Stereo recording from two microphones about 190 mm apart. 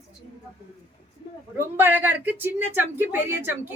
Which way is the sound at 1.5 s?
15° right (ahead or behind).